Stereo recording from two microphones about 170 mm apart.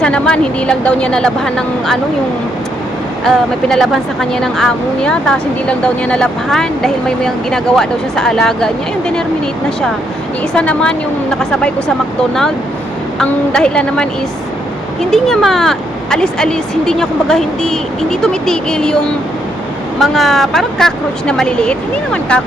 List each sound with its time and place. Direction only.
0.0 s speech: 5° left (ahead or behind)
3.2 s speech: centre (ahead or behind)
10.5 s speech: 5° left (ahead or behind)
13.1 s speech: 5° left (ahead or behind)
15.1 s speech: centre (ahead or behind)
20.0 s speech: centre (ahead or behind)